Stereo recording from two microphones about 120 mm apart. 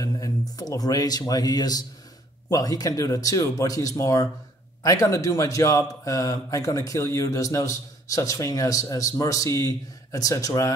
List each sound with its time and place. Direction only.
0.0 s speech: 30° left (ahead or behind)